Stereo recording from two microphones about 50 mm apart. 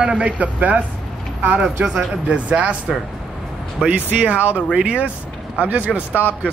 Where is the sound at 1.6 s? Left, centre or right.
Right.